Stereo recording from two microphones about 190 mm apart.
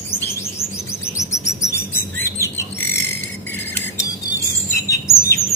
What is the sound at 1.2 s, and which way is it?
Chirp, 15° left (ahead or behind).